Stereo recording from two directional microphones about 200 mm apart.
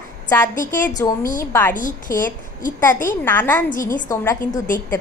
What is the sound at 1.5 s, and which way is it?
Speech, 10° left (ahead or behind).